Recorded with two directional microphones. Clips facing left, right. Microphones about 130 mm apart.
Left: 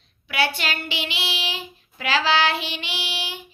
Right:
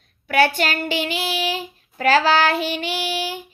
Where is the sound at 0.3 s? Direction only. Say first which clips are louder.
Right 7 dB; 45° right (ahead or behind).